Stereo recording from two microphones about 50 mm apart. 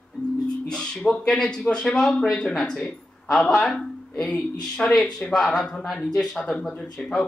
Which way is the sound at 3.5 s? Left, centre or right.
Left.